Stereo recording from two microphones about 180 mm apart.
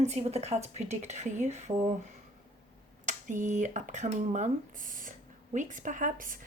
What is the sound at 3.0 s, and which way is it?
A woman's voice, 45° right (ahead or behind).